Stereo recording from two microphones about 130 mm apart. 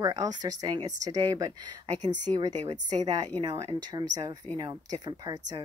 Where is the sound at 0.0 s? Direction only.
25° right (ahead or behind).